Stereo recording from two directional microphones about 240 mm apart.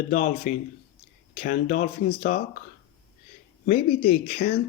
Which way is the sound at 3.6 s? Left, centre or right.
Left.